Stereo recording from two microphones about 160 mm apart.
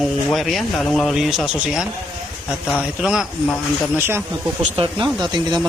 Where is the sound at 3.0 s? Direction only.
5° right (ahead or behind).